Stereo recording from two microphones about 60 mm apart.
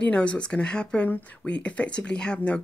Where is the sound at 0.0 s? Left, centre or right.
Centre.